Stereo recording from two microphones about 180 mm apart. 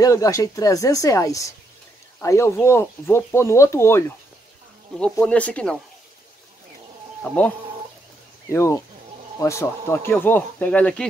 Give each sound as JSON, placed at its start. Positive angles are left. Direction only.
{"t": 0.0, "sound": "speech", "side_deg": 20}
{"t": 5.2, "sound": "speech", "side_deg": 5}
{"t": 7.3, "sound": "speech", "side_deg": 5}
{"t": 8.5, "sound": "speech", "side_deg": 15}